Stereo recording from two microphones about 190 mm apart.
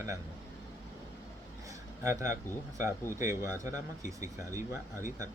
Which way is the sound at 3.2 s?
15° right (ahead or behind).